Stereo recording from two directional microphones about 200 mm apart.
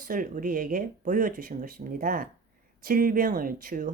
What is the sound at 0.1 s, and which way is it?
Speech, 45° right (ahead or behind).